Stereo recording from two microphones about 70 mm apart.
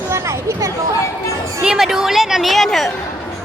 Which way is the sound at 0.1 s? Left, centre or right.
Right.